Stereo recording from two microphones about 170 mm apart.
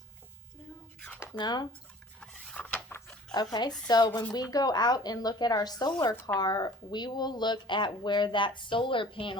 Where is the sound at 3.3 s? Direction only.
25° left (ahead or behind).